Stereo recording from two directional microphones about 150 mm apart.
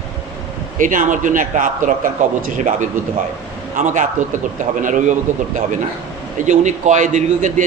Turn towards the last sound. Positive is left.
turn(degrees=-55)  # may be behind; listen again after turning